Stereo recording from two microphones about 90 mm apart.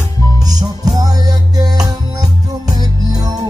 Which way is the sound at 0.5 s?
45° right (ahead or behind).